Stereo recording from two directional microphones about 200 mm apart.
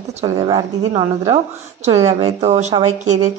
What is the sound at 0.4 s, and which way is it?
Speech, 20° right (ahead or behind).